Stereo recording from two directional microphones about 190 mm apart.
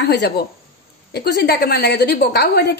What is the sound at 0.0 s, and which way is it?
A woman's voice, 65° left (ahead or behind).